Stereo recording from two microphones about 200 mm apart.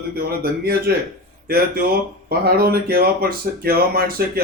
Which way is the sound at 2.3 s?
50° right (ahead or behind).